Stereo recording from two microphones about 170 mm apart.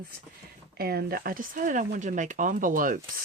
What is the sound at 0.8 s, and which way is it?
Speech, 65° right (ahead or behind).